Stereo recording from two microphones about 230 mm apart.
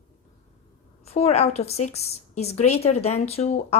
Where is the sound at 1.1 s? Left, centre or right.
Left.